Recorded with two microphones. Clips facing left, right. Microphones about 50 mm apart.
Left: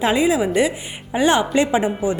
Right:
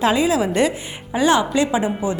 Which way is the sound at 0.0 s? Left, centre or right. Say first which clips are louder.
Even; left.